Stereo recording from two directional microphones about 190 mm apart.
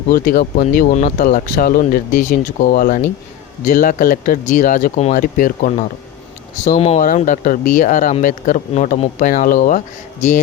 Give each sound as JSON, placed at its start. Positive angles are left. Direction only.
{"t": 0.1, "sound": "speech", "side_deg": 50}
{"t": 6.7, "sound": "speech", "side_deg": 35}